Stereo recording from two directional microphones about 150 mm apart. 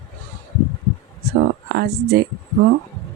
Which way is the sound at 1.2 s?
90° right.